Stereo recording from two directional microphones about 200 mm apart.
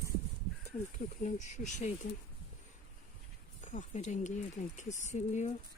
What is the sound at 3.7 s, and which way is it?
Speech, 35° left (ahead or behind).